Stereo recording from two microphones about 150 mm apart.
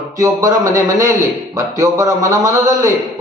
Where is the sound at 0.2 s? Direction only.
20° right (ahead or behind).